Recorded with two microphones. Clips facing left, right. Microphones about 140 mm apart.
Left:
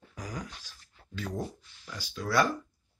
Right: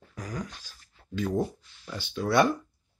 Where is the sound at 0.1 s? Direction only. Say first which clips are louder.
Right 3 dB; 10° left (ahead or behind).